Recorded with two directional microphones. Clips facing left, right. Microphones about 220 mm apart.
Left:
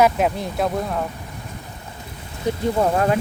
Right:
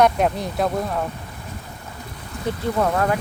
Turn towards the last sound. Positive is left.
turn(degrees=25)  # may be behind; listen again after turning